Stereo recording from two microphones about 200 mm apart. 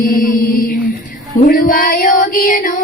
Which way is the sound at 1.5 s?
45° left (ahead or behind).